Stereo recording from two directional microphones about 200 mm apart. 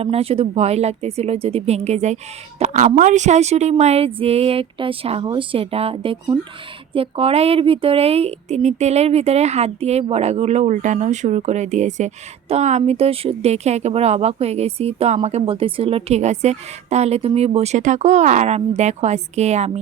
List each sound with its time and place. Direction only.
0.0 s a woman's voice: 30° right (ahead or behind)